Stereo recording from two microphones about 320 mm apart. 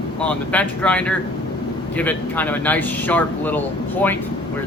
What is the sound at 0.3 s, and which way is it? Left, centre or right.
Speech, centre.